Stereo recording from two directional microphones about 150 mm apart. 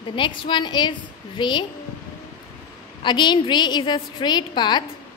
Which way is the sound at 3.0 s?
30° left (ahead or behind).